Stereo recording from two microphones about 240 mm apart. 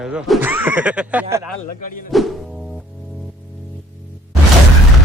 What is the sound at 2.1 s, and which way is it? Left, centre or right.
Speech, centre.